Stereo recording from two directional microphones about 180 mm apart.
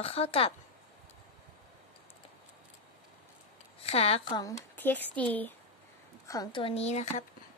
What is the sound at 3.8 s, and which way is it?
Speech, 35° left (ahead or behind).